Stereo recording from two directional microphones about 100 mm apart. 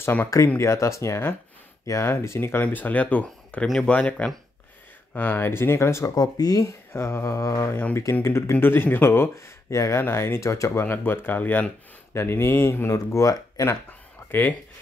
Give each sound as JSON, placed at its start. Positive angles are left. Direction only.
{"t": 0.0, "sound": "speech", "side_deg": 20}
{"t": 6.9, "sound": "speech", "side_deg": 25}
{"t": 7.7, "sound": "speech", "side_deg": 20}
{"t": 12.9, "sound": "speech", "side_deg": 35}